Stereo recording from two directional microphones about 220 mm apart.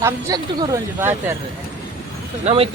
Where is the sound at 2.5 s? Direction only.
25° right (ahead or behind).